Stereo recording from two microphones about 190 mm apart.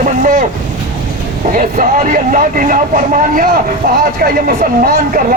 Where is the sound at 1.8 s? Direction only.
45° right (ahead or behind).